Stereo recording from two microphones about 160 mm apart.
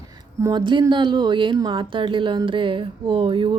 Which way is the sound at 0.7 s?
30° right (ahead or behind).